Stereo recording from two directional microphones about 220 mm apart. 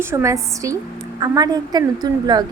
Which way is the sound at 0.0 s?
10° right (ahead or behind).